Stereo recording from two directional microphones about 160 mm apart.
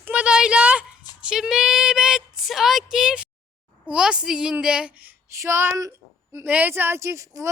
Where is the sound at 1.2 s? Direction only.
5° right (ahead or behind).